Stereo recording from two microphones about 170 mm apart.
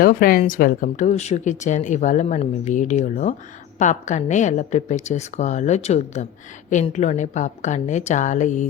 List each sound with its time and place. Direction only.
0.0 s speech: 55° left (ahead or behind)